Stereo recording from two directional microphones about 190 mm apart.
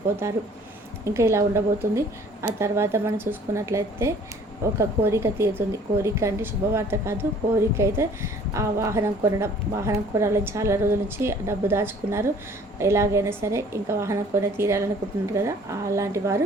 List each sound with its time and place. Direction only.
1.0 s a woman's voice: 15° right (ahead or behind)